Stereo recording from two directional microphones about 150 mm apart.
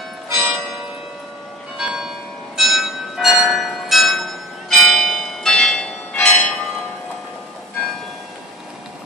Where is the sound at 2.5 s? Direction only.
Centre (ahead or behind).